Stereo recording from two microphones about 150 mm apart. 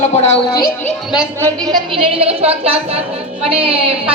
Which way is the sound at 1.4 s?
30° right (ahead or behind).